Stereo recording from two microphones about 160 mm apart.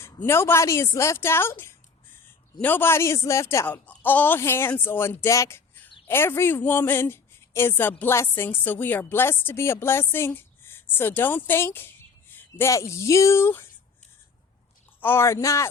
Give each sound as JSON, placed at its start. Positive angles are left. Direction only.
{"t": 0.0, "sound": "a woman's voice", "side_deg": 15}
{"t": 15.0, "sound": "speech", "side_deg": 15}